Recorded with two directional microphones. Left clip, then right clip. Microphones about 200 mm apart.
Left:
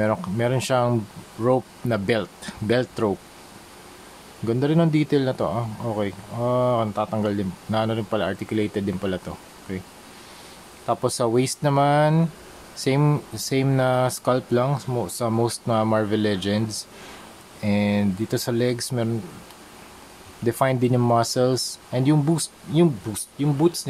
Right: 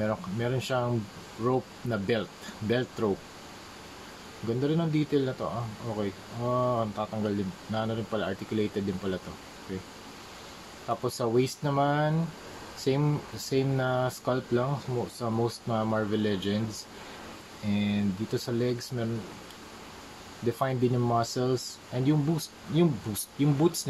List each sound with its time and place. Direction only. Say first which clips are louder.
0.0 s speech: left 8 dB; 35° left (ahead or behind)
4.5 s speech: left 8 dB; 35° left (ahead or behind)
10.9 s speech: left 7 dB; 40° left (ahead or behind)
20.4 s speech: left 7 dB; 35° left (ahead or behind)
23.1 s speech: left 3 dB; 25° left (ahead or behind)